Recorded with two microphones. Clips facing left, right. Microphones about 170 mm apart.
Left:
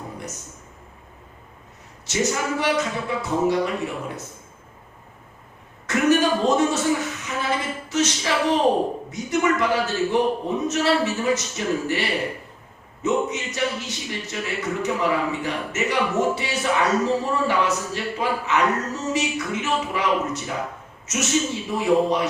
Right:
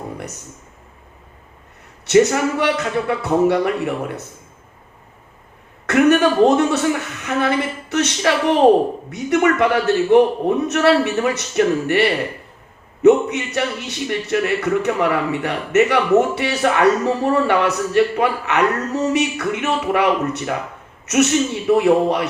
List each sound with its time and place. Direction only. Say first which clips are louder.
2.0 s a man's voice: right 10 dB; 60° right (ahead or behind)
5.8 s a man's voice: right 5 dB; 65° right (ahead or behind)